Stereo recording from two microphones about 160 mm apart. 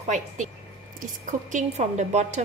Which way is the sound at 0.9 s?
50° right (ahead or behind).